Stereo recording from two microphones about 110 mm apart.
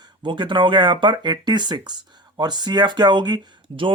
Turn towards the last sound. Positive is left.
turn(degrees=-50)  # may be behind; listen again after turning